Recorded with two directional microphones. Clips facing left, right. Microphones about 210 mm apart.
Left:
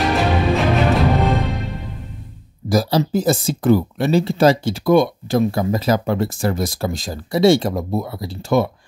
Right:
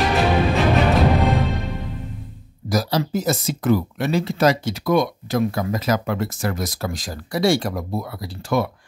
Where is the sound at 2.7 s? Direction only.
30° left (ahead or behind).